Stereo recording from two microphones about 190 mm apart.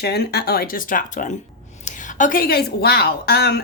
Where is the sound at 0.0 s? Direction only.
60° left (ahead or behind).